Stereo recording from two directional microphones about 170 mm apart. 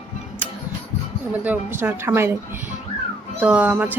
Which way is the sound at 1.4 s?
10° right (ahead or behind).